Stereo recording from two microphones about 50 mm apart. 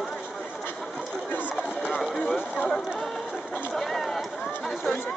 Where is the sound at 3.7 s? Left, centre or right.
Centre.